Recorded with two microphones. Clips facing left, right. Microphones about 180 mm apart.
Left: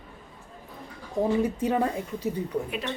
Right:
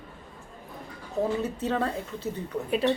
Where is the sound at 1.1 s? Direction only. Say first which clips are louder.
Left 3 dB; 10° left (ahead or behind).